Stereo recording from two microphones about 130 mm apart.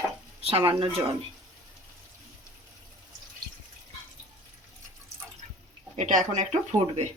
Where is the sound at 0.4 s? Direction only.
40° right (ahead or behind).